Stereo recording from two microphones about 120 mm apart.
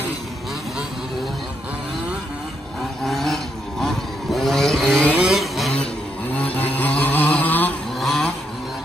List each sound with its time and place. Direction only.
3.1 s vehicle: centre (ahead or behind)
5.8 s a sound: 10° left (ahead or behind)
8.0 s vehicle: centre (ahead or behind)